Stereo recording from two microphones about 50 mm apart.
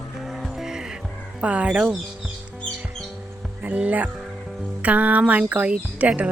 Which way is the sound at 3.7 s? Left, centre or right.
Right.